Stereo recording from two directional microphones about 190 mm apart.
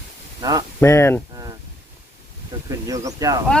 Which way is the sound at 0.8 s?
15° left (ahead or behind).